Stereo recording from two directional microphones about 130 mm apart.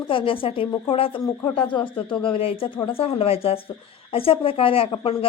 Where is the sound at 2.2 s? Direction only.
45° left (ahead or behind).